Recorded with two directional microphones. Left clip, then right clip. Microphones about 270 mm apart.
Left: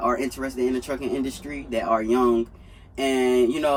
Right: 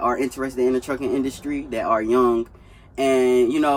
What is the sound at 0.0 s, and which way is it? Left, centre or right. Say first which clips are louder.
Speech: right 2 dB; centre.